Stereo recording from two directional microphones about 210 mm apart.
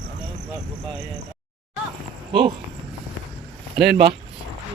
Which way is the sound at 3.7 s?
55° right (ahead or behind).